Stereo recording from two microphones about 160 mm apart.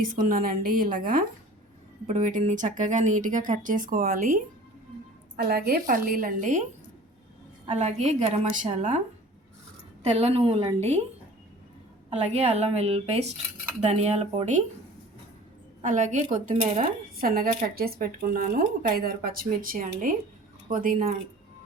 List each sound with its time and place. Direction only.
0.0 s speech: 60° right (ahead or behind)
5.4 s speech: 75° right (ahead or behind); by 6.7 s 55° right (ahead or behind)
7.7 s speech: 45° right (ahead or behind)
10.0 s speech: 45° right (ahead or behind)
12.1 s a woman's voice: 40° right (ahead or behind)
15.8 s speech: 50° right (ahead or behind)